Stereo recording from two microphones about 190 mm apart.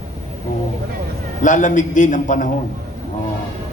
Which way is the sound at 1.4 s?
40° left (ahead or behind).